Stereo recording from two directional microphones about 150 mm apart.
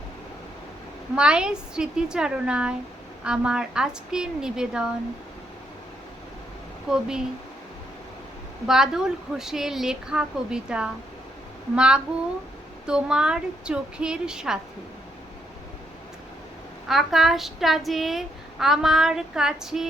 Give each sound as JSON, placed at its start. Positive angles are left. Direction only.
{"t": 1.1, "sound": "speech", "side_deg": -5}
{"t": 6.9, "sound": "speech", "side_deg": -5}
{"t": 8.6, "sound": "speech", "side_deg": -5}
{"t": 11.7, "sound": "child singing", "side_deg": -5}
{"t": 12.8, "sound": "speech", "side_deg": -5}
{"t": 16.9, "sound": "speech", "side_deg": 0}